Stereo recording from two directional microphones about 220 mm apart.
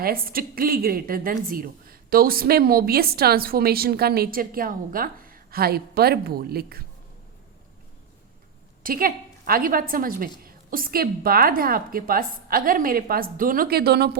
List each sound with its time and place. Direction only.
0.0 s a woman's voice: 40° right (ahead or behind)
8.8 s a woman's voice: 40° right (ahead or behind)